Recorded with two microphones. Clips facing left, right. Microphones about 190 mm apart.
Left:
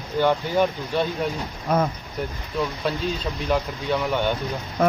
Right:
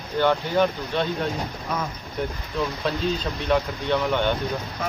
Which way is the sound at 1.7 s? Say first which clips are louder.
Left 8 dB; 55° left (ahead or behind).